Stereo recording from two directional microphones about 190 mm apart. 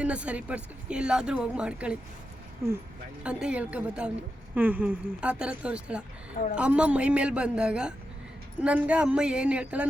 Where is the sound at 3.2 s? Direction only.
5° right (ahead or behind).